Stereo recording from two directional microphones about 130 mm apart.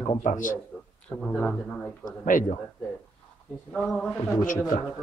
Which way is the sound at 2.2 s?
90° left.